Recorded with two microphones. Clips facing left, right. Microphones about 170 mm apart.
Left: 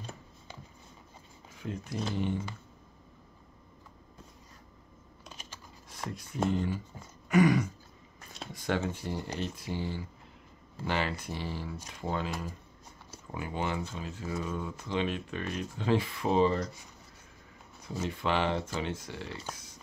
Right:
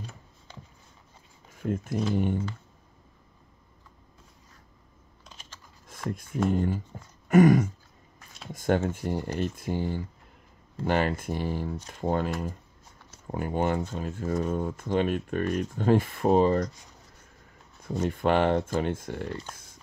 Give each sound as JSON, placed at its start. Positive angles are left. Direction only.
{"t": 0.5, "sound": "a sound", "side_deg": 10}
{"t": 1.6, "sound": "speech", "side_deg": -50}
{"t": 5.2, "sound": "typing", "side_deg": 10}
{"t": 6.0, "sound": "speech", "side_deg": -50}
{"t": 7.2, "sound": "a sound", "side_deg": -50}
{"t": 8.5, "sound": "speech", "side_deg": -50}
{"t": 18.0, "sound": "speech", "side_deg": -50}